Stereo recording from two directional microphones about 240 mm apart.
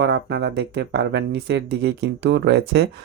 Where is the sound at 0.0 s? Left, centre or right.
Right.